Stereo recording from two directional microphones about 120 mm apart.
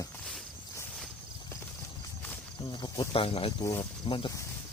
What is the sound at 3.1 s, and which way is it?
Speech, 50° left (ahead or behind).